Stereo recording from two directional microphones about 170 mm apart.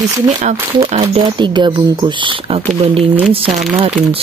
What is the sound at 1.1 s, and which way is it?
Speech, 25° right (ahead or behind).